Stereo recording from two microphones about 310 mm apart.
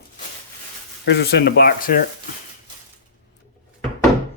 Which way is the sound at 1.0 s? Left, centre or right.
Left.